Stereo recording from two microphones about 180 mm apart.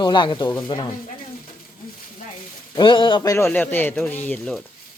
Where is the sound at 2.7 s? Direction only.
25° left (ahead or behind); by 4.6 s 5° left (ahead or behind).